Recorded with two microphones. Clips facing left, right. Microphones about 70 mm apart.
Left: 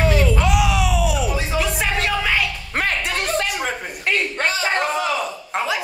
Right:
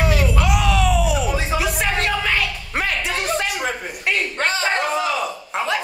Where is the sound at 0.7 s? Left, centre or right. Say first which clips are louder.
Right 2 dB; centre.